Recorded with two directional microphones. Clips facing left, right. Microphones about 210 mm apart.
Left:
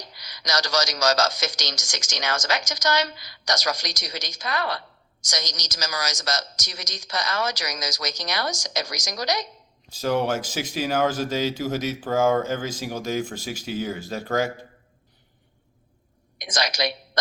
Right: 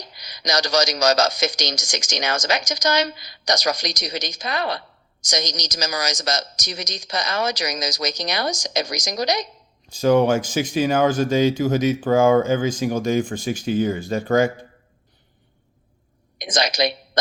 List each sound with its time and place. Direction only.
0.2 s speech: 15° right (ahead or behind)
9.9 s speech: 5° left (ahead or behind)
16.4 s speech: 20° right (ahead or behind)